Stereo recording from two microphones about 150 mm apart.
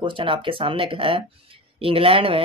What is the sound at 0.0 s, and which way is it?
Speech, 35° right (ahead or behind).